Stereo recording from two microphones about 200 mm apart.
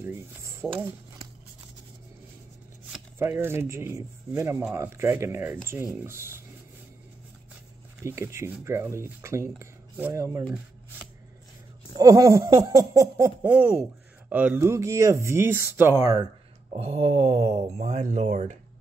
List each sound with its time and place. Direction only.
0.0 s speech: 15° right (ahead or behind)
2.9 s speech: 10° right (ahead or behind)
8.0 s speech: 15° right (ahead or behind)
12.0 s speech: 15° right (ahead or behind)
16.7 s speech: 30° right (ahead or behind)